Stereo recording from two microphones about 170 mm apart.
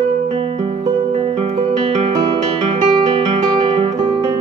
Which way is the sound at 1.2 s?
35° right (ahead or behind).